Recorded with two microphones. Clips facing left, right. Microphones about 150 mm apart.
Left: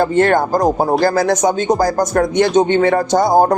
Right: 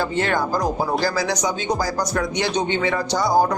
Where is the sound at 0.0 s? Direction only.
50° left (ahead or behind).